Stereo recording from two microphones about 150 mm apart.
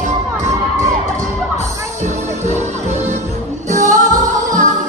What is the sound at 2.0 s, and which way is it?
Music, 50° right (ahead or behind).